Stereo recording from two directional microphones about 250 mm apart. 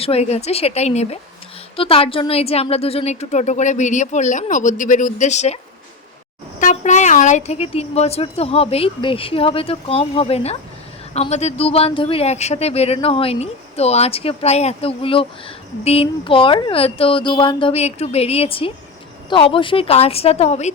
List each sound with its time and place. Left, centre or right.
0.0 s speech: left
6.6 s speech: left